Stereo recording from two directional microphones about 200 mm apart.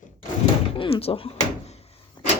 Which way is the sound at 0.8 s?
30° left (ahead or behind).